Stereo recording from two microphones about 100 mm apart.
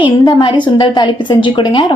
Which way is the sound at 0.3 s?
55° left (ahead or behind).